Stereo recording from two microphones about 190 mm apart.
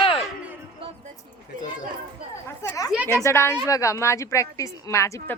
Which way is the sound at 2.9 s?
5° right (ahead or behind).